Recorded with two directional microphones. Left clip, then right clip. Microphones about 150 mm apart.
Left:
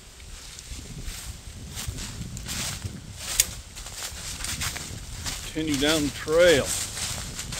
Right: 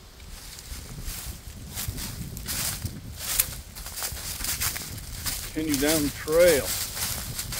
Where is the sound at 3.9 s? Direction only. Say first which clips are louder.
Right 1 dB; 60° right (ahead or behind).